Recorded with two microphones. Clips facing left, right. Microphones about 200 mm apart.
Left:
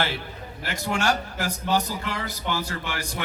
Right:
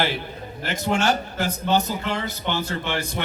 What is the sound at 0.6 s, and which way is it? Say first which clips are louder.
A man's voice: right 3 dB; 20° right (ahead or behind).